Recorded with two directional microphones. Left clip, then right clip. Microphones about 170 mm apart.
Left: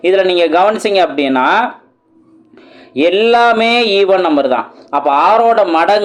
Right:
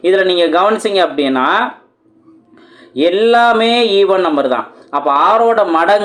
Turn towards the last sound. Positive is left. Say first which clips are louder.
# left 1 dB
turn(degrees=30)  # may be behind; listen again after turning